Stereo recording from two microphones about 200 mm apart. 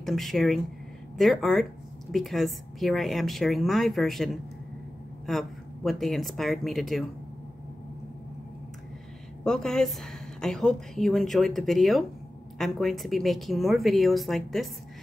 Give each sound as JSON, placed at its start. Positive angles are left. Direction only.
{"t": 0.0, "sound": "a woman's voice", "side_deg": 0}
{"t": 9.4, "sound": "a woman's voice", "side_deg": 5}